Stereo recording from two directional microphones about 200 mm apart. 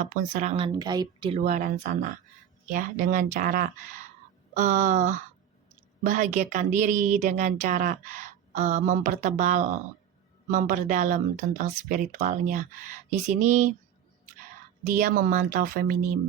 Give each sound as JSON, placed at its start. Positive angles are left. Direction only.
{"t": 0.0, "sound": "speech", "side_deg": -40}
{"t": 14.8, "sound": "speech", "side_deg": -40}